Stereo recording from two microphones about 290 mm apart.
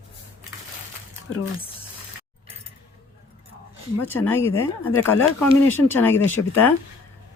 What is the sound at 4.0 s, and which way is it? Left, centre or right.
Speech, centre.